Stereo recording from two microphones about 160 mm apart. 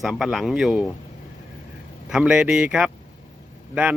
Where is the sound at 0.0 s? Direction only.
5° right (ahead or behind).